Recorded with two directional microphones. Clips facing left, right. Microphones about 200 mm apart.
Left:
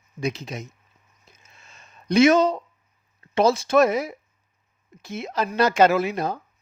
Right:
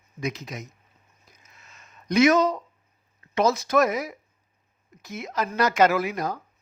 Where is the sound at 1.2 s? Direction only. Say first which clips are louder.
Left 2 dB; 25° left (ahead or behind).